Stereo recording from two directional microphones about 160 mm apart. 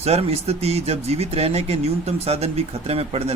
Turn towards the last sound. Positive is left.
turn(degrees=-40)  # may be behind; listen again after turning